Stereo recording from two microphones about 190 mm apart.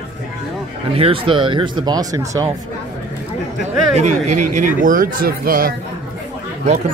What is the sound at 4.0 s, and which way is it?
Speech, 40° right (ahead or behind).